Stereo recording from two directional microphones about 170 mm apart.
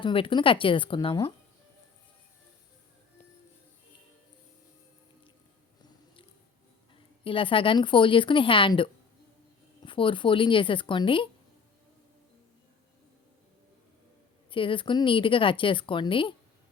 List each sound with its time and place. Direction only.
0.0 s speech: 30° left (ahead or behind)
7.3 s speech: 30° left (ahead or behind)
14.5 s speech: 30° left (ahead or behind)